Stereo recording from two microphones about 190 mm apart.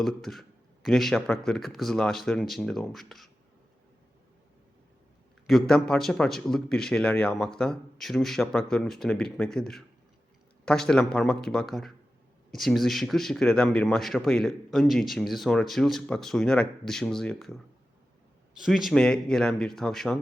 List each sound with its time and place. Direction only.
0.0 s speech: centre (ahead or behind)
5.5 s speech: centre (ahead or behind)